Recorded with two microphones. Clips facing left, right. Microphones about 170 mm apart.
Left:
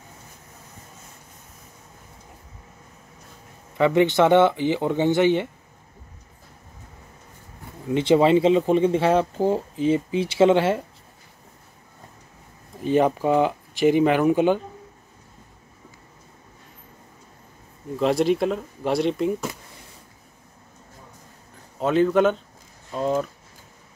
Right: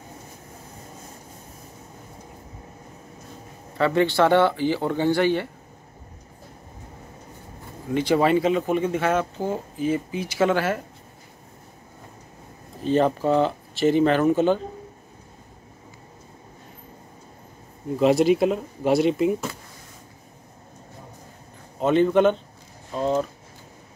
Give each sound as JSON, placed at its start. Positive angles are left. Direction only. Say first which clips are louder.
{"t": 3.7, "sound": "speech", "louder": "left 2 dB", "side_deg": 15}
{"t": 7.9, "sound": "speech", "louder": "left 3 dB", "side_deg": 25}
{"t": 12.8, "sound": "speech", "louder": "left 1 dB", "side_deg": 10}
{"t": 17.9, "sound": "speech", "louder": "right 2 dB", "side_deg": 0}
{"t": 21.7, "sound": "speech", "louder": "right 1 dB", "side_deg": 0}